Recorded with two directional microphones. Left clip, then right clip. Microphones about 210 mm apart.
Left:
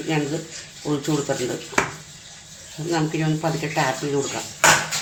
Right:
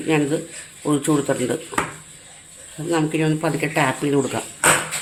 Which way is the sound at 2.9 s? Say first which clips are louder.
Right 3 dB; 30° right (ahead or behind).